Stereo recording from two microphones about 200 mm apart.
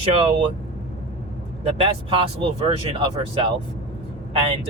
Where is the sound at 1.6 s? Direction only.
25° right (ahead or behind).